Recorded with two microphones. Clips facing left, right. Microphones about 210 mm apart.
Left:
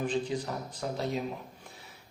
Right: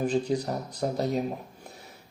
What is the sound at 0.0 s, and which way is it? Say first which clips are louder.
Speech: right 5 dB; 40° right (ahead or behind).